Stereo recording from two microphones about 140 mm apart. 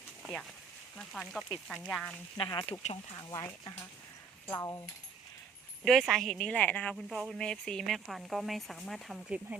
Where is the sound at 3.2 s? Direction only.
25° left (ahead or behind).